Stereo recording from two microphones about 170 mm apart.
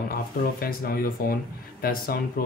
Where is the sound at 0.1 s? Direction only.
60° left (ahead or behind).